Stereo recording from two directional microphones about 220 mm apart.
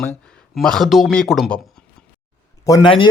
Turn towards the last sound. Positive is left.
turn(degrees=20)  # may be behind; listen again after turning